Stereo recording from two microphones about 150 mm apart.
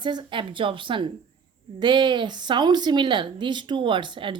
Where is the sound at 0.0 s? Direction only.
30° right (ahead or behind).